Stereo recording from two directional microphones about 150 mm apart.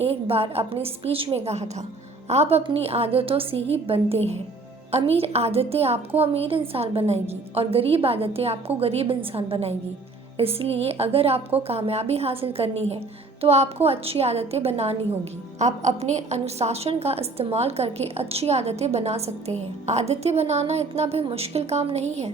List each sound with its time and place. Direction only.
0.0 s a woman's voice: 40° right (ahead or behind)